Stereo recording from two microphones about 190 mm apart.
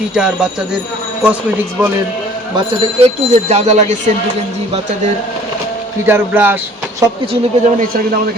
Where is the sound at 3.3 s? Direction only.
35° right (ahead or behind).